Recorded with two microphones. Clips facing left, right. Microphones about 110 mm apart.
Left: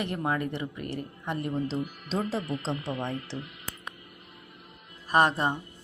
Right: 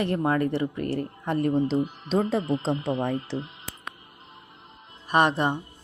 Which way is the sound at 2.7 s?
25° right (ahead or behind).